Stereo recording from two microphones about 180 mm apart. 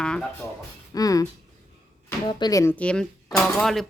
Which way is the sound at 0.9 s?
20° left (ahead or behind).